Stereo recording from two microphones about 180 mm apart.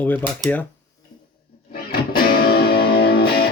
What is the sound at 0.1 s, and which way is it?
Speech, 10° left (ahead or behind).